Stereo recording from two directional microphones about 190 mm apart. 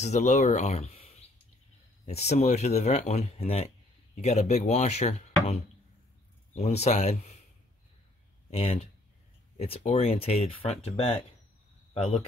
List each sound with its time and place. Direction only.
0.0 s speech: 35° left (ahead or behind)
6.5 s speech: 35° left (ahead or behind)
8.5 s speech: 30° left (ahead or behind)